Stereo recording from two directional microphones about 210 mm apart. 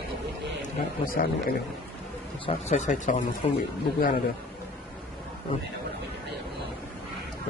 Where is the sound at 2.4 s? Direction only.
35° left (ahead or behind).